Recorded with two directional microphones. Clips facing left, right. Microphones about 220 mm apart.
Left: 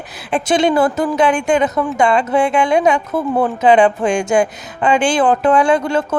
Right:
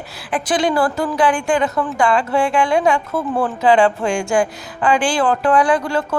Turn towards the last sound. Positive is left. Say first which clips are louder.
# left 3 dB
turn(degrees=20)  # may be behind; listen again after turning